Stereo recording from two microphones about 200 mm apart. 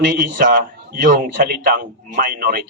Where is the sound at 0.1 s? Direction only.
40° right (ahead or behind).